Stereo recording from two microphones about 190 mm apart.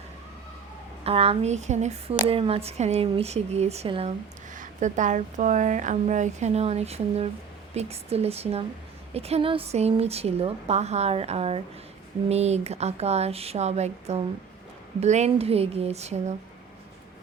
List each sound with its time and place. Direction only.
1.0 s speech: 30° right (ahead or behind)
4.5 s speech: 40° right (ahead or behind)